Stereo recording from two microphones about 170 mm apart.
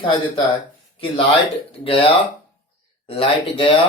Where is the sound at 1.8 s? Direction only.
35° left (ahead or behind).